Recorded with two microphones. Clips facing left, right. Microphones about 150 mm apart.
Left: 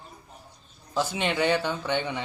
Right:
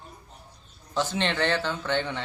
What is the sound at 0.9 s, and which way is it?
Speech, 10° left (ahead or behind).